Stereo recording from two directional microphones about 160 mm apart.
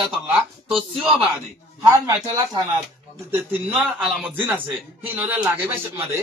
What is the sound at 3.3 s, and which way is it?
A man's voice, 10° right (ahead or behind).